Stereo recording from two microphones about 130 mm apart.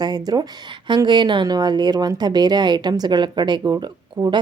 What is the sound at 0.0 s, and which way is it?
A woman's voice, 30° right (ahead or behind).